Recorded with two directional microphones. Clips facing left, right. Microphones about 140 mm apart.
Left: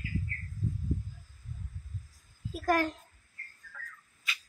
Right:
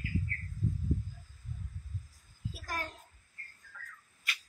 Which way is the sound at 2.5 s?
65° left (ahead or behind).